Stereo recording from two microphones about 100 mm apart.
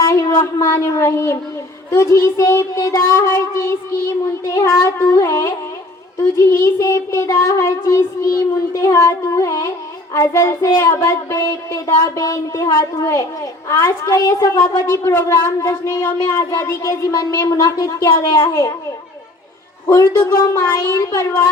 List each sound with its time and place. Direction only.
0.0 s speech: 30° left (ahead or behind)
1.9 s child singing: 30° left (ahead or behind)
12.1 s speech: 30° left (ahead or behind)
14.8 s child singing: 25° left (ahead or behind)
16.2 s speech: 30° left (ahead or behind)
18.4 s child singing: 30° left (ahead or behind)
19.9 s speech: 35° left (ahead or behind)